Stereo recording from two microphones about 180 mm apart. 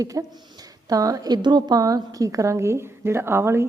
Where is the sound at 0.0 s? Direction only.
20° right (ahead or behind).